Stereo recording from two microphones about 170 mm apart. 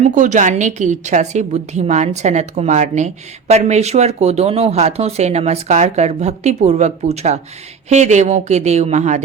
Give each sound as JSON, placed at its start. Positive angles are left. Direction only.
{"t": 0.1, "sound": "a woman's voice", "side_deg": -45}